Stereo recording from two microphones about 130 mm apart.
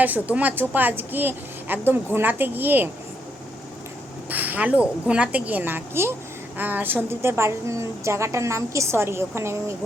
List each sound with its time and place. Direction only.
0.0 s a woman's voice: 10° right (ahead or behind)
4.3 s a woman's voice: 15° right (ahead or behind)